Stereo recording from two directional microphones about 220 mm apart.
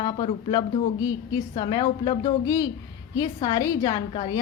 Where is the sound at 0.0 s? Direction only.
20° left (ahead or behind).